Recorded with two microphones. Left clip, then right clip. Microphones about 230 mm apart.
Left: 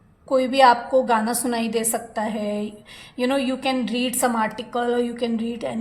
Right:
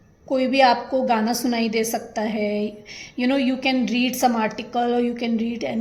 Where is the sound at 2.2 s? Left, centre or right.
Left.